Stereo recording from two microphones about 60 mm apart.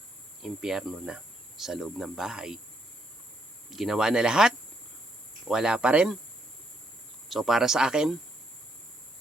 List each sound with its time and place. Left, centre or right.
0.4 s speech: centre
3.7 s speech: centre
7.3 s speech: centre